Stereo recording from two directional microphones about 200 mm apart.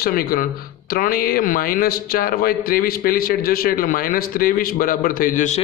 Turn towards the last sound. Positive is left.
turn(degrees=45)  # may be behind; listen again after turning